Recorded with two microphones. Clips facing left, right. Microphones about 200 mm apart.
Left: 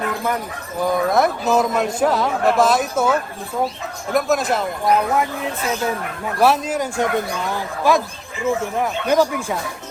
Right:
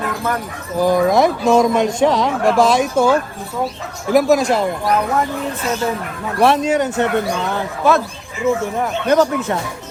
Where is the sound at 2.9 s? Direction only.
30° right (ahead or behind).